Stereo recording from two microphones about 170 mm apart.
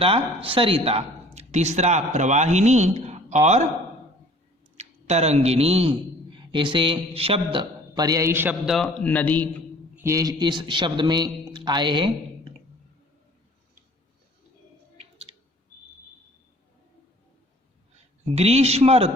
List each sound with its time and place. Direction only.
0.0 s speech: 30° right (ahead or behind)
4.8 s a man's voice: 40° right (ahead or behind); by 9.6 s 10° left (ahead or behind)
9.9 s a man's voice: 15° right (ahead or behind)
15.3 s clicking: 30° right (ahead or behind)
18.3 s speech: 40° right (ahead or behind)